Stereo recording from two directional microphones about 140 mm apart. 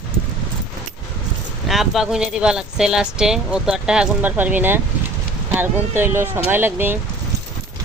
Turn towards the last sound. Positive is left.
turn(degrees=-15)  # may be behind; listen again after turning